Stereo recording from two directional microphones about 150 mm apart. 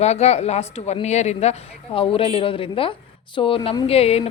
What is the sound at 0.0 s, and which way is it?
A woman's voice, 45° left (ahead or behind).